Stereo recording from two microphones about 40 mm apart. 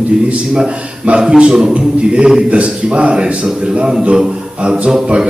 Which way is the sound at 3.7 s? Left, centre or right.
Centre.